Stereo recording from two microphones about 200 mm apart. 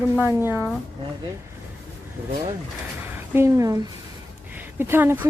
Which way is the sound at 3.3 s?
15° right (ahead or behind).